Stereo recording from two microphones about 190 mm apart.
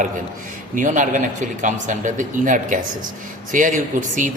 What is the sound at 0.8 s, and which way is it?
A man's voice, 40° right (ahead or behind).